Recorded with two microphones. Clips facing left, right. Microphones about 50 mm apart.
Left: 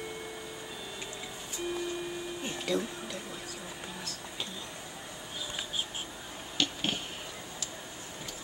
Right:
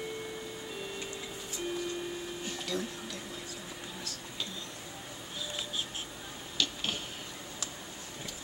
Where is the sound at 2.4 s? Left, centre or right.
Left.